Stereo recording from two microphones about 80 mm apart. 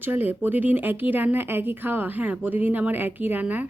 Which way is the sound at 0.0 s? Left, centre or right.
Right.